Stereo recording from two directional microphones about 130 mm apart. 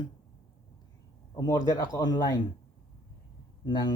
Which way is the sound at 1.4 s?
30° left (ahead or behind).